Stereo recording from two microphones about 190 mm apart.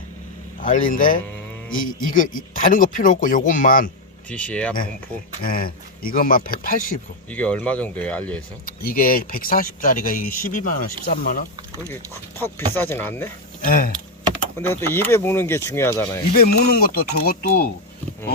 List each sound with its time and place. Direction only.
0.6 s speech: 45° left (ahead or behind)
4.3 s speech: 5° left (ahead or behind)
5.4 s speech: 50° left (ahead or behind)
7.3 s speech: 10° left (ahead or behind)
8.6 s speech: 50° left (ahead or behind)
12.4 s speech: 10° left (ahead or behind)
13.6 s speech: 45° left (ahead or behind)
14.3 s speech: 10° left (ahead or behind)
16.3 s speech: 55° left (ahead or behind)